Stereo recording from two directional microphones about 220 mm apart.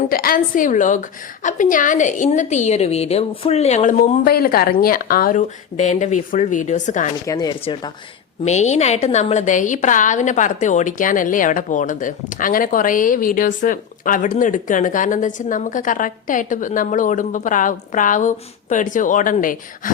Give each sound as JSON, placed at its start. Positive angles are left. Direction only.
{"t": 0.1, "sound": "a woman's voice", "side_deg": 40}
{"t": 7.3, "sound": "speech", "side_deg": 15}
{"t": 8.4, "sound": "a woman's voice", "side_deg": 30}